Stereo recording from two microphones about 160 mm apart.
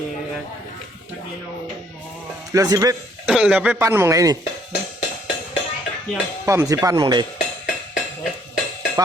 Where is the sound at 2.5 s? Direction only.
20° right (ahead or behind).